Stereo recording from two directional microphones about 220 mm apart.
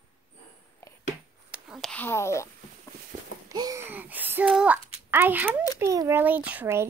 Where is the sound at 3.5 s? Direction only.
15° right (ahead or behind).